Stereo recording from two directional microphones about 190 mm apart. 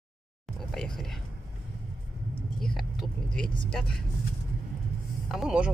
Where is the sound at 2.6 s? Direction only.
Centre (ahead or behind).